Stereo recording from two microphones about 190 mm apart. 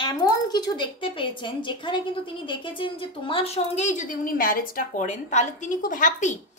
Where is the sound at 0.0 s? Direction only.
20° left (ahead or behind).